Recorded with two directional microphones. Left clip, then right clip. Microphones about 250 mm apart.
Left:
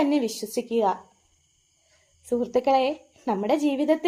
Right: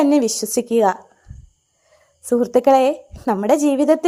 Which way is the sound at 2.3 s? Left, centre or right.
Right.